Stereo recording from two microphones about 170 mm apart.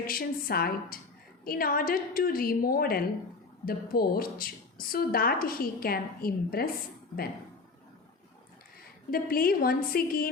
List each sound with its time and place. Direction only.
0.1 s a woman's voice: 60° left (ahead or behind)
9.0 s a woman's voice: 60° left (ahead or behind)